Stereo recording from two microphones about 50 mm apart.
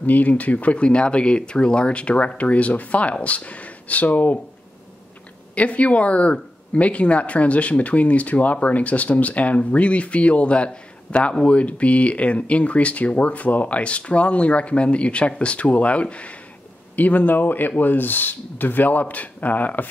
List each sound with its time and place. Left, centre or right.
0.0 s speech: left
5.5 s speech: left